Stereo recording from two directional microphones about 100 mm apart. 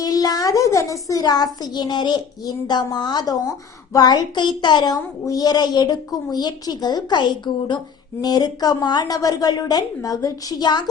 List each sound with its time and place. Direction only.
0.0 s a child's voice: 40° left (ahead or behind)